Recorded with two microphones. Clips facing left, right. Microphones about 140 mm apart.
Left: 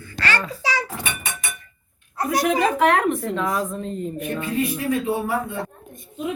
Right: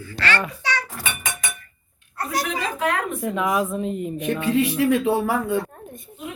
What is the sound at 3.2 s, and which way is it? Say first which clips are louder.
Speech: right 2 dB; 10° right (ahead or behind).